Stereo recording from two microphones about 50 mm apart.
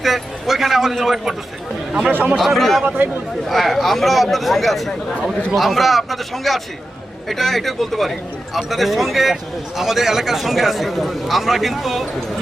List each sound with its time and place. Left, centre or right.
0.0 s a man's voice: centre
1.9 s speech: right
2.2 s speech: centre
2.8 s speech: right
3.5 s speech: centre